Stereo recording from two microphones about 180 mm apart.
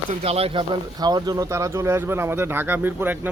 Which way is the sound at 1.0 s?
20° right (ahead or behind).